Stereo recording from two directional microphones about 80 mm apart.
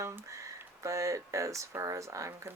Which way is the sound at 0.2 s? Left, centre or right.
Right.